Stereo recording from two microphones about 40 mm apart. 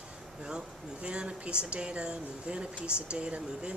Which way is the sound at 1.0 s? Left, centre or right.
Right.